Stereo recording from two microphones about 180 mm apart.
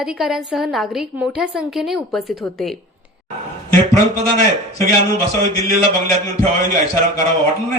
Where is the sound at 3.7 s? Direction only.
15° left (ahead or behind).